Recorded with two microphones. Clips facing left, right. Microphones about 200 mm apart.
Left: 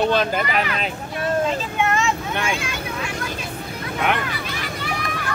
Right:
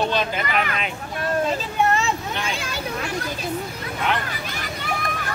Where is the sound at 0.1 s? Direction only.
50° left (ahead or behind).